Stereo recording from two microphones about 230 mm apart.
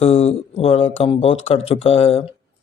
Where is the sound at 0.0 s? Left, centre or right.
Left.